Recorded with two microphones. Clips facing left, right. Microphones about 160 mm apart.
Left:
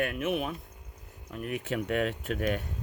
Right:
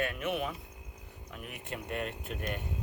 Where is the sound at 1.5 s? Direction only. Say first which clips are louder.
Left 8 dB; 90° left.